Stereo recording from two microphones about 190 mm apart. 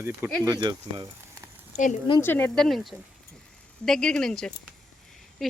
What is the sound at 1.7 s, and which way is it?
Speech, 40° left (ahead or behind).